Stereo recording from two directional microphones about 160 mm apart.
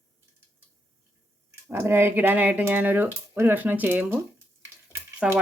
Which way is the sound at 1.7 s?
15° right (ahead or behind).